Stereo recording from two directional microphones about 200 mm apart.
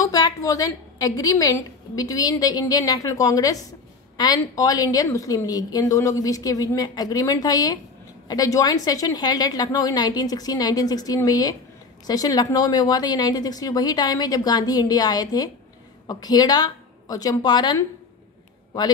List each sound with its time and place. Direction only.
0.0 s a woman's voice: 15° left (ahead or behind)